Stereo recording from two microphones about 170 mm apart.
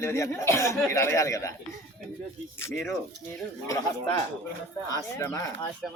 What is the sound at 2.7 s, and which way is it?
Speech, 5° left (ahead or behind).